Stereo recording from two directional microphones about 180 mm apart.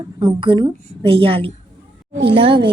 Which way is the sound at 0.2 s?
25° right (ahead or behind).